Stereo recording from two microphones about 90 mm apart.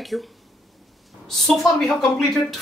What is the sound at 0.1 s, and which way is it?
Speech, centre (ahead or behind).